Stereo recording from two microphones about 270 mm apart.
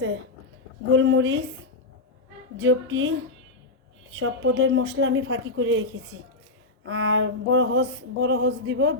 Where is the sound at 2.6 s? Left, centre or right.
Right.